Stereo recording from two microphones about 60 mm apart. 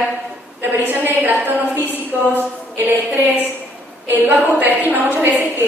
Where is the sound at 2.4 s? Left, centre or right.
Right.